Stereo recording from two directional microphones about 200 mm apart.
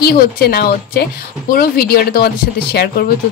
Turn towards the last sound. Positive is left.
turn(degrees=50)  # may be behind; listen again after turning